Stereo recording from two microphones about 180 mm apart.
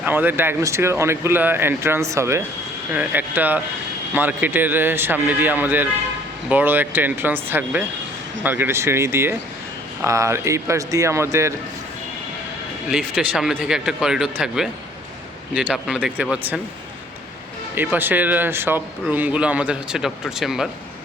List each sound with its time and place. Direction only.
0.0 s speech: 10° right (ahead or behind)
12.9 s speech: centre (ahead or behind)
17.7 s speech: 10° right (ahead or behind)